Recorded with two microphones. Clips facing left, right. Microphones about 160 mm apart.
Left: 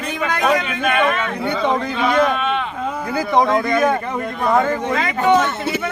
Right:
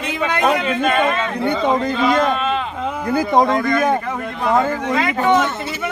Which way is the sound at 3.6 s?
5° left (ahead or behind).